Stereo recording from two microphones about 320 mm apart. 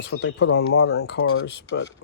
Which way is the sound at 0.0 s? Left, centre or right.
Left.